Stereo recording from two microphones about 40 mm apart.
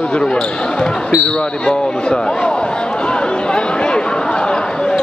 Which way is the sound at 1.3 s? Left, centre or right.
Left.